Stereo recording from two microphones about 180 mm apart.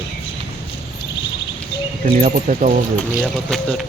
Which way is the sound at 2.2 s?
45° right (ahead or behind).